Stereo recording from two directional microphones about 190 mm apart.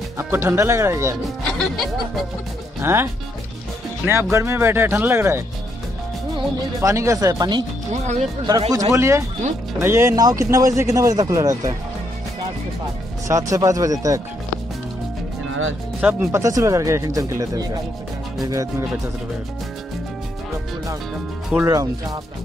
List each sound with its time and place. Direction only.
0.2 s speech: 15° right (ahead or behind)
1.4 s speech: 5° left (ahead or behind)
2.8 s speech: 10° right (ahead or behind)
7.9 s speech: 35° right (ahead or behind)
8.5 s speech: 20° right (ahead or behind)
13.3 s speech: 15° right (ahead or behind)
16.0 s speech: 10° right (ahead or behind)
21.5 s speech: 15° right (ahead or behind)